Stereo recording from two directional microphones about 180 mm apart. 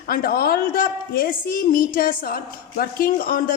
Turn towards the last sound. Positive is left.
turn(degrees=55)  # may be behind; listen again after turning